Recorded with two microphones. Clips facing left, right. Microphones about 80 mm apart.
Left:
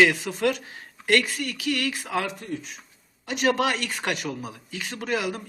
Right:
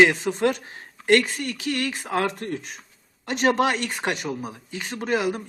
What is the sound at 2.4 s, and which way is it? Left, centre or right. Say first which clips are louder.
Speech: right 3 dB; right.